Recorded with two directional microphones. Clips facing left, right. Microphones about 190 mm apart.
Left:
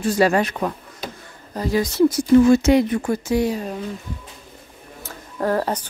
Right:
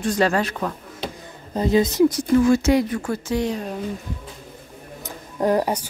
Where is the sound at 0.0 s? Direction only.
10° left (ahead or behind).